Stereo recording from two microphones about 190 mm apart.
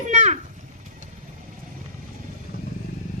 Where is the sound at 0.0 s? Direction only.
35° right (ahead or behind).